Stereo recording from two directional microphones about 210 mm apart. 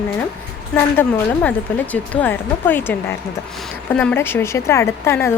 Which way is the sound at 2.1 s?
10° left (ahead or behind).